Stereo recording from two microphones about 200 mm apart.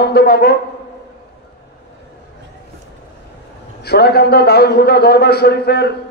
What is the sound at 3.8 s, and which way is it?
Speech, 55° left (ahead or behind).